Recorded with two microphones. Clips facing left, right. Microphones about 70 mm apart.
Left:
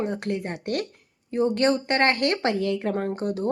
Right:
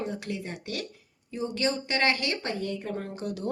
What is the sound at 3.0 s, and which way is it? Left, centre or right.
Speech, left.